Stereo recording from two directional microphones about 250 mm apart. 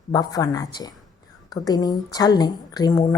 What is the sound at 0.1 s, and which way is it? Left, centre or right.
A woman's voice, centre.